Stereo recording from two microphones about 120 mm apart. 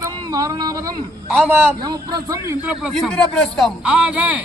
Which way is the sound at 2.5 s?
15° right (ahead or behind).